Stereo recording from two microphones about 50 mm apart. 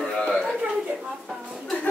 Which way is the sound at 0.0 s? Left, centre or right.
Centre.